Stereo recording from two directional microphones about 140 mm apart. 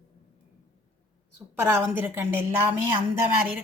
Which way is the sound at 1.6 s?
15° right (ahead or behind).